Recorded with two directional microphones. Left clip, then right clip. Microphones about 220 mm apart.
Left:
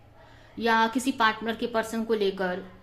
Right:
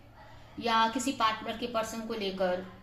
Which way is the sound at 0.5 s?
50° left (ahead or behind).